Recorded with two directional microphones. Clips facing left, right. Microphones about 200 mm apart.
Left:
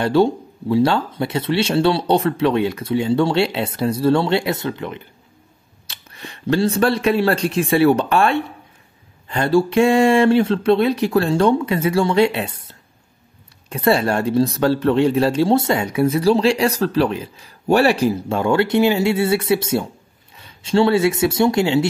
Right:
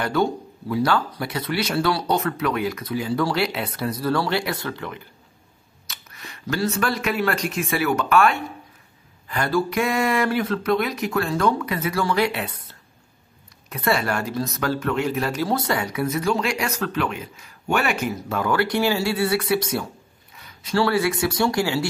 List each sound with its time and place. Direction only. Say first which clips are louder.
0.0 s speech: left 6 dB; 30° left (ahead or behind)
13.7 s speech: left 6 dB; 30° left (ahead or behind)